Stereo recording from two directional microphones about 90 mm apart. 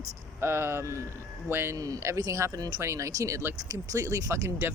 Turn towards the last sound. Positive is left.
turn(degrees=-30)  # may be behind; listen again after turning